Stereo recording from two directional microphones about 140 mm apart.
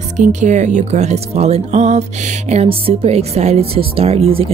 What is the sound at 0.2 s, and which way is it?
Speech, 60° right (ahead or behind).